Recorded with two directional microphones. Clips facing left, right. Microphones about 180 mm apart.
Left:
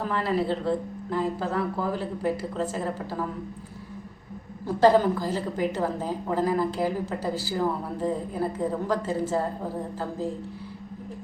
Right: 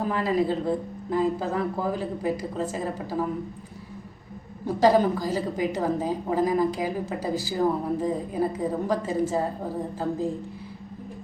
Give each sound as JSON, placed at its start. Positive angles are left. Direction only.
{"t": 0.1, "sound": "a woman's voice", "side_deg": -15}
{"t": 4.6, "sound": "a woman's voice", "side_deg": -15}